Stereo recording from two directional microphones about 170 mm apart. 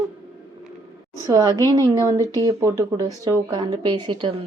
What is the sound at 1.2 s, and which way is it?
A woman's voice, 20° right (ahead or behind).